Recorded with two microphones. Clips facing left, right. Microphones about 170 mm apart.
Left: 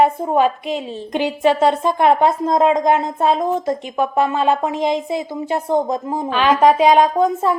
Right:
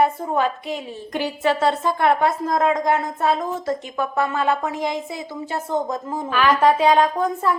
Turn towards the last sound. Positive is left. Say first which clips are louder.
# left 4 dB
turn(degrees=15)  # may be behind; listen again after turning